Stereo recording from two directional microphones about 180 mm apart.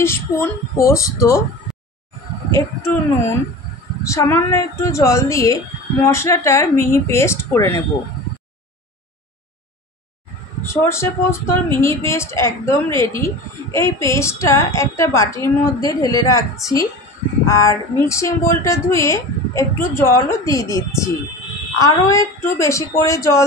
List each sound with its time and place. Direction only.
0.0 s speech: 15° left (ahead or behind)
2.5 s speech: 15° left (ahead or behind)
10.6 s speech: 15° left (ahead or behind)
21.7 s speech: 15° left (ahead or behind)